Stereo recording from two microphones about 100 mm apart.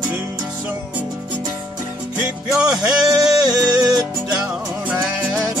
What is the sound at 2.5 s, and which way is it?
Music, 10° right (ahead or behind).